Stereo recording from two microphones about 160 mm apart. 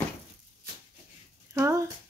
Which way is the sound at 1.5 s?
15° right (ahead or behind).